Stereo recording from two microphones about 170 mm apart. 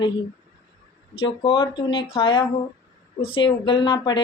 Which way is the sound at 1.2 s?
30° left (ahead or behind).